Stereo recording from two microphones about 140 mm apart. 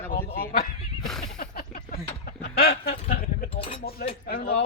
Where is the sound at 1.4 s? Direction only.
90° left.